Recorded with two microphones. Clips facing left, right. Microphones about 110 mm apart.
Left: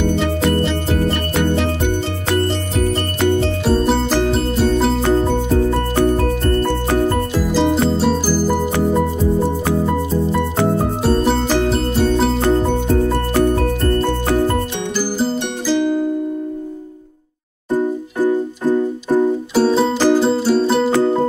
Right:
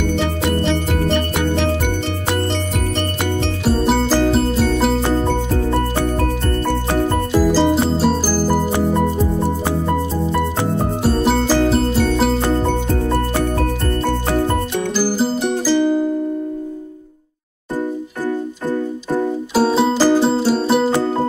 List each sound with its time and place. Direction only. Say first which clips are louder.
3.2 s music: left 5 dB; 5° right (ahead or behind)
7.5 s music: even; 5° right (ahead or behind)
11.1 s music: even; 5° right (ahead or behind)
15.0 s music: even; 5° right (ahead or behind)
17.7 s music: left 5 dB; 15° left (ahead or behind)
19.5 s music: right 2 dB; 5° right (ahead or behind)